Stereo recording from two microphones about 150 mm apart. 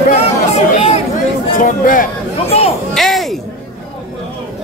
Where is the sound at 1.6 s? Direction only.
65° left (ahead or behind).